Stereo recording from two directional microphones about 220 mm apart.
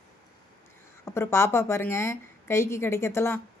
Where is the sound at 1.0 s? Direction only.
10° left (ahead or behind).